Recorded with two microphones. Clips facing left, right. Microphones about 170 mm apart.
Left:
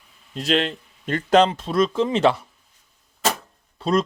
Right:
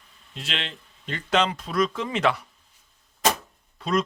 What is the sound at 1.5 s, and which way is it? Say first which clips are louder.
Speech: left 4 dB; 25° left (ahead or behind).